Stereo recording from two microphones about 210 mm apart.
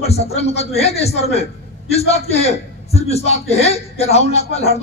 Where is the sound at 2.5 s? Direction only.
30° left (ahead or behind).